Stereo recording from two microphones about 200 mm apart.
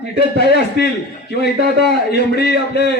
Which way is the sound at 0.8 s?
55° left (ahead or behind).